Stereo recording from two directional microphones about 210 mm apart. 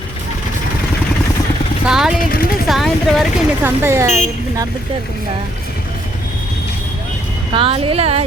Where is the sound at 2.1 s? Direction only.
45° left (ahead or behind).